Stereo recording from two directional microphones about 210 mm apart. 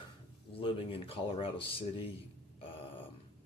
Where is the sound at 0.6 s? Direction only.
25° left (ahead or behind).